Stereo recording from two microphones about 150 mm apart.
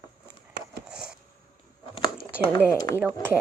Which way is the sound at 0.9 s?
5° right (ahead or behind).